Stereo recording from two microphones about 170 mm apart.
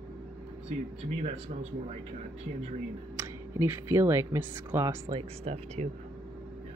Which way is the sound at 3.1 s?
15° right (ahead or behind).